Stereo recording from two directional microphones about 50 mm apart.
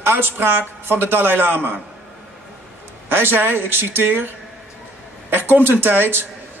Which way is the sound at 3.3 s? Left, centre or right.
Right.